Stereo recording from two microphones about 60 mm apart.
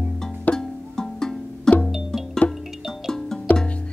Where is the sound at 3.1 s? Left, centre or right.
Centre.